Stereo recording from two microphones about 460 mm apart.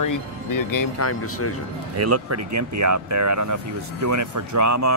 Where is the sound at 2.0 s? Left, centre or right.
Right.